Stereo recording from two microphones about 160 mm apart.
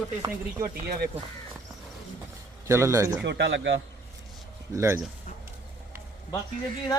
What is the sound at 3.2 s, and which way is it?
Speech, 90° right.